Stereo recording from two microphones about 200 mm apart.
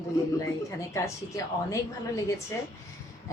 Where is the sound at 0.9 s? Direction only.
15° left (ahead or behind).